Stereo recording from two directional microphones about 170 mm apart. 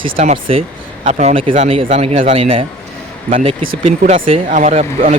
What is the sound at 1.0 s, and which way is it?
A man's voice, 45° right (ahead or behind).